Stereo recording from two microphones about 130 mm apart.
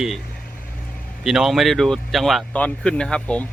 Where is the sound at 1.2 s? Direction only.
Centre (ahead or behind).